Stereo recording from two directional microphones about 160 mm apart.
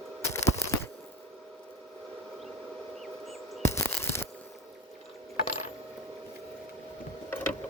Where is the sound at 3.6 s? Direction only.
20° left (ahead or behind).